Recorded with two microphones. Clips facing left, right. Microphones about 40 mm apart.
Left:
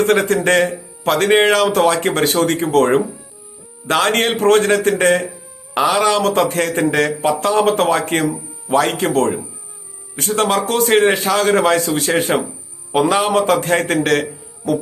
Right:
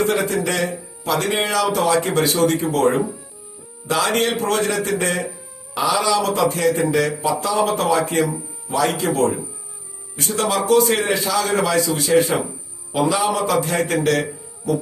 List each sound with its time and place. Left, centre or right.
0.0 s speech: left